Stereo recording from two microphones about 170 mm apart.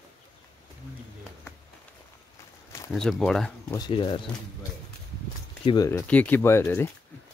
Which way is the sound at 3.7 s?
25° left (ahead or behind).